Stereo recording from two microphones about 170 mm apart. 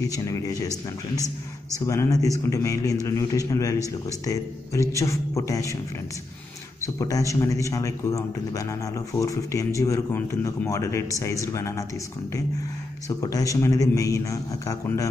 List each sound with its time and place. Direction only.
0.0 s speech: 20° left (ahead or behind)
7.0 s speech: 20° left (ahead or behind)
13.2 s speech: 20° left (ahead or behind)